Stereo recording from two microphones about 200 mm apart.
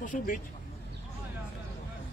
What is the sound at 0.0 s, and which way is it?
Speech, 40° left (ahead or behind).